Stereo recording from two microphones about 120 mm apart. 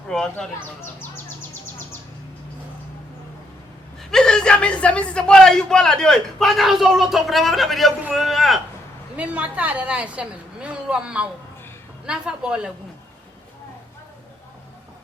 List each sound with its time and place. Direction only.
0.1 s a man's voice: 5° left (ahead or behind)
4.1 s a man's voice: 5° left (ahead or behind)
9.1 s a woman's voice: 10° right (ahead or behind)